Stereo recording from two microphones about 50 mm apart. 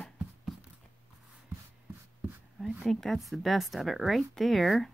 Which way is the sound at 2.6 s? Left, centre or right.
Centre.